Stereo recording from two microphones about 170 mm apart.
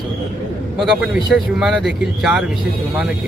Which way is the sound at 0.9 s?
5° right (ahead or behind).